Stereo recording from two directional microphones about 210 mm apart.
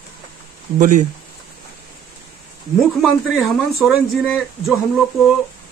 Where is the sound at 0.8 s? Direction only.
35° right (ahead or behind).